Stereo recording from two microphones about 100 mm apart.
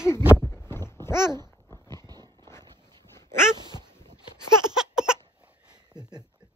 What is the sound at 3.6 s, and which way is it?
Cat, 45° right (ahead or behind).